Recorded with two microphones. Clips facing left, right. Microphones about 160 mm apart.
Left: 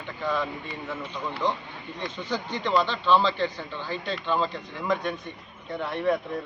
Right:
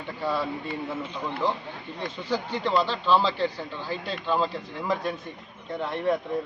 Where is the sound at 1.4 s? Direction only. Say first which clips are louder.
Even; 5° right (ahead or behind).